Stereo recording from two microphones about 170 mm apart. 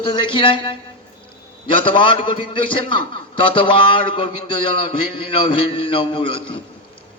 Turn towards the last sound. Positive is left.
turn(degrees=30)  # may be behind; listen again after turning